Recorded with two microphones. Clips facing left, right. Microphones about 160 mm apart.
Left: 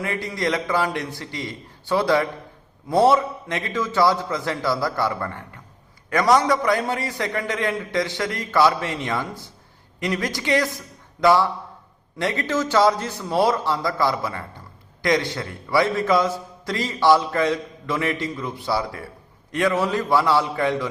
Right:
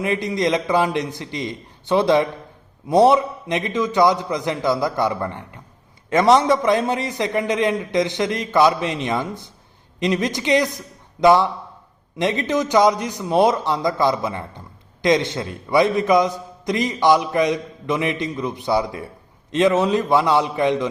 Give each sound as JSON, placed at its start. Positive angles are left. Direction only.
{"t": 0.0, "sound": "a man's voice", "side_deg": -20}